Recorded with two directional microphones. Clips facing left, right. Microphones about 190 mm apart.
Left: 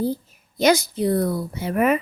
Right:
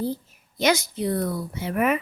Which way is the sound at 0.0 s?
40° left (ahead or behind).